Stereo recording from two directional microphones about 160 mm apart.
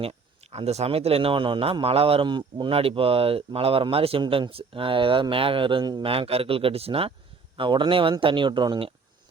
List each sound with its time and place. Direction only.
0.0 s a man's voice: 40° right (ahead or behind)